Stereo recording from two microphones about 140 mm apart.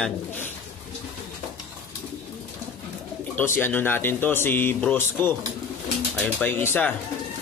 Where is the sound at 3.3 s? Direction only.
15° left (ahead or behind).